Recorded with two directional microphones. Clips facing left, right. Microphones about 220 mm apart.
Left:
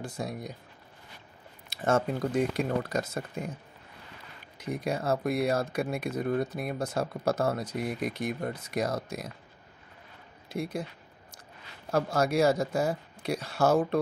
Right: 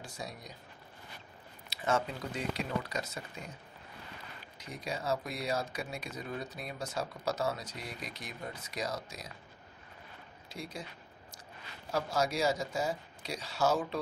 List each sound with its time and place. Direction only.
0.0 s speech: 55° left (ahead or behind)
1.7 s speech: 50° left (ahead or behind)
4.6 s speech: 55° left (ahead or behind)
10.5 s speech: 55° left (ahead or behind)
11.9 s speech: 55° left (ahead or behind)